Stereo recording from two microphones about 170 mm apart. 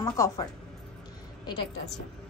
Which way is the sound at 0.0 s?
20° left (ahead or behind).